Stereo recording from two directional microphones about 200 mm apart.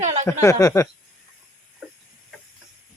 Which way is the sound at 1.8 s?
5° left (ahead or behind).